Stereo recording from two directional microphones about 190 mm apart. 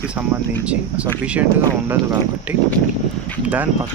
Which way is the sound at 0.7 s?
5° right (ahead or behind).